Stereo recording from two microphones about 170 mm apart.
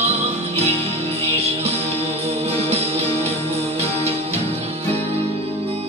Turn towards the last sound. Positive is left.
turn(degrees=-35)  # may be behind; listen again after turning